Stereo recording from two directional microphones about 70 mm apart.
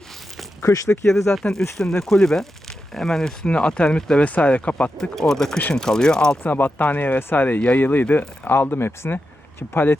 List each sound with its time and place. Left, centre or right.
0.6 s speech: left
1.3 s speech: centre
4.9 s speech: centre
6.4 s speech: left